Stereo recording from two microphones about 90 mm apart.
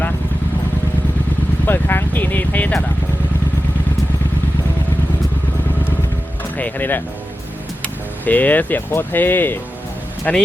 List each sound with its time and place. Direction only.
1.6 s speech: 25° left (ahead or behind)
6.6 s speech: 20° left (ahead or behind)
8.2 s speech: 20° left (ahead or behind)